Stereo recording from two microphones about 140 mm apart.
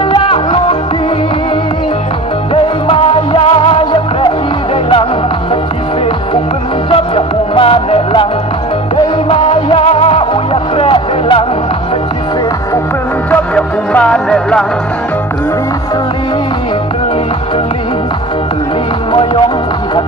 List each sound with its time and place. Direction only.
0.1 s music: 40° left (ahead or behind)
2.5 s music: 40° left (ahead or behind)
6.9 s music: 40° left (ahead or behind)
9.3 s music: 40° left (ahead or behind)
13.3 s music: 10° left (ahead or behind)